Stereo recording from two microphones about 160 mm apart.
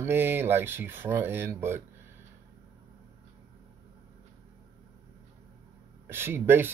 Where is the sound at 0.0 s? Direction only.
15° right (ahead or behind).